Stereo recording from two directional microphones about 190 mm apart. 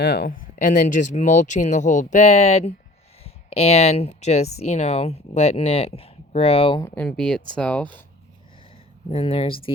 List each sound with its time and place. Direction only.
0.0 s speech: 55° left (ahead or behind); by 6.8 s 30° left (ahead or behind)
6.8 s speech: 5° left (ahead or behind)
9.0 s speech: 30° left (ahead or behind)